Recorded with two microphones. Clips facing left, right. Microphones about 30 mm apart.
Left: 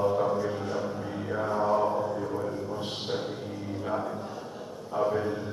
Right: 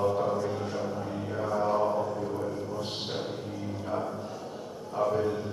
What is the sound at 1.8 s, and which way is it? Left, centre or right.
Mantra, centre.